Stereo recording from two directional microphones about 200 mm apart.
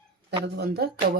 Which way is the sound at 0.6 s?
50° right (ahead or behind).